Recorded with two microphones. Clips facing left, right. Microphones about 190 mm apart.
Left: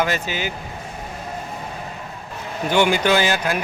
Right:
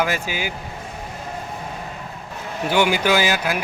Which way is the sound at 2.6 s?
10° right (ahead or behind).